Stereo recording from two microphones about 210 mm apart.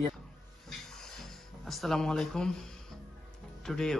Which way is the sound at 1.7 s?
Centre (ahead or behind).